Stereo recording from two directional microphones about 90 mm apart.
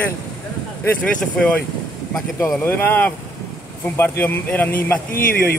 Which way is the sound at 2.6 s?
20° left (ahead or behind).